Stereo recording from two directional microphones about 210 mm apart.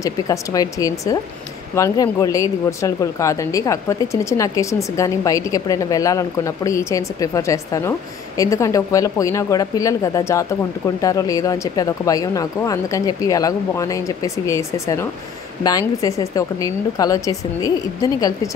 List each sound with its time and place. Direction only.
0.0 s speech: 15° left (ahead or behind)